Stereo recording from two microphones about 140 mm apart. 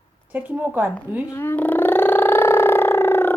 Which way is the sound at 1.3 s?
15° left (ahead or behind).